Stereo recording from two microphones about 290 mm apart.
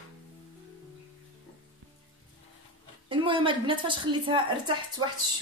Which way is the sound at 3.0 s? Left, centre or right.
Centre.